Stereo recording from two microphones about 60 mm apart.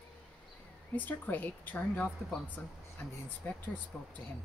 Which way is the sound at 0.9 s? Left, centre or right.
Left.